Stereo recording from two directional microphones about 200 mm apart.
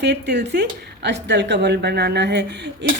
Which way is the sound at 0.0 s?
60° right (ahead or behind).